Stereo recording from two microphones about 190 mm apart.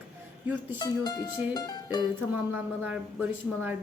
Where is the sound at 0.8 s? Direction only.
20° left (ahead or behind).